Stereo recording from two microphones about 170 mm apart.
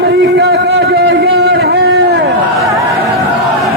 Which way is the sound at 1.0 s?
75° right (ahead or behind).